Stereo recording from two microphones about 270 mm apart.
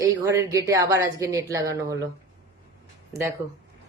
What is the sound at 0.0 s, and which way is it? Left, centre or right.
A woman's voice, centre.